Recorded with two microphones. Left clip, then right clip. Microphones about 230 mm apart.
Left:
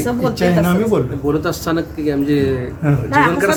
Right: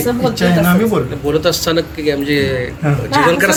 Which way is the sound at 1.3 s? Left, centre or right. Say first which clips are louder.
Right 5 dB; left.